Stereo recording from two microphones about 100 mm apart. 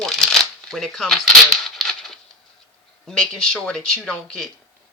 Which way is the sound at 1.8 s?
5° left (ahead or behind).